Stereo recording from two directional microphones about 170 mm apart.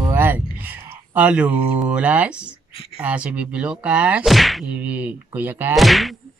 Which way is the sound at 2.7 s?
35° left (ahead or behind).